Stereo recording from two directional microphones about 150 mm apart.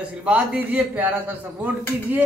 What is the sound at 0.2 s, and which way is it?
A man's voice, 10° right (ahead or behind).